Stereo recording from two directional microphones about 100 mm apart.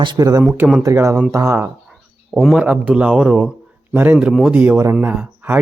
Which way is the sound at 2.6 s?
15° right (ahead or behind).